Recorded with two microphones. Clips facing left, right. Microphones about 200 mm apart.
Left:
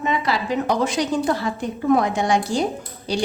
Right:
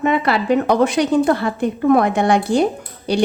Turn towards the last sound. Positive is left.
turn(degrees=-60)  # may be behind; listen again after turning